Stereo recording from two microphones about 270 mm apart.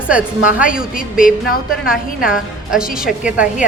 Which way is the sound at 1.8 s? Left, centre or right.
Centre.